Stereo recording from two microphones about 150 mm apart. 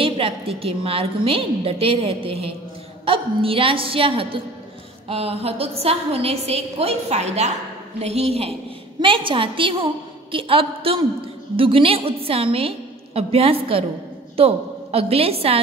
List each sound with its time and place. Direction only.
0.0 s a woman's voice: 40° right (ahead or behind)